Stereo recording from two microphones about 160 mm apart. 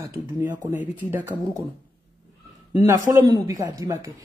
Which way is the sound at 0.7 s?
10° right (ahead or behind).